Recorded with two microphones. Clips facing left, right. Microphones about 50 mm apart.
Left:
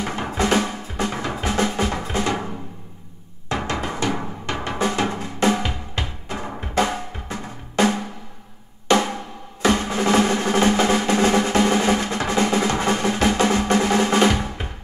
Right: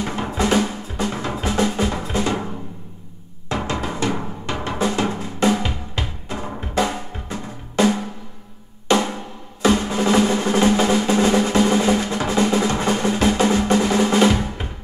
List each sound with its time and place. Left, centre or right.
0.1 s music: left
3.4 s music: left
4.6 s drum: left
9.6 s drum: left